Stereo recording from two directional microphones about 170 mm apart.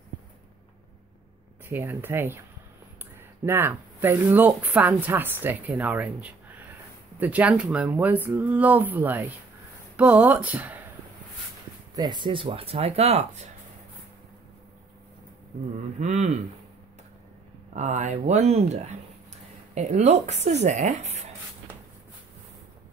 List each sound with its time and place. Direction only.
1.7 s speech: 15° right (ahead or behind)
3.4 s speech: 15° right (ahead or behind)
11.9 s speech: 25° right (ahead or behind); by 13.5 s 40° right (ahead or behind)
16.0 s speech: 45° right (ahead or behind)
17.7 s speech: 45° right (ahead or behind)